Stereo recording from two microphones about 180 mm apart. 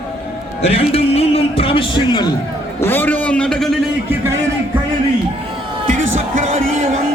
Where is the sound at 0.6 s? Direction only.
35° left (ahead or behind).